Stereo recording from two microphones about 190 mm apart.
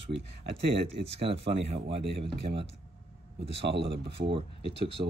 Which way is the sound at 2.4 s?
65° right (ahead or behind).